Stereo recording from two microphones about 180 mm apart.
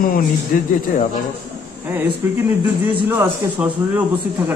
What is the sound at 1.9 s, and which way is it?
A man's voice, 10° right (ahead or behind).